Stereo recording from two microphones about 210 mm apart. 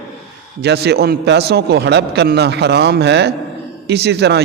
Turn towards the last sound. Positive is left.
turn(degrees=-55)  # may be behind; listen again after turning